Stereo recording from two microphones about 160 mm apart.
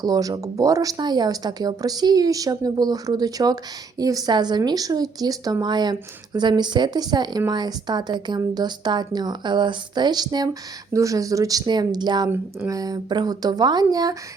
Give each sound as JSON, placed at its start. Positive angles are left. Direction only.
{"t": 0.0, "sound": "speech", "side_deg": -20}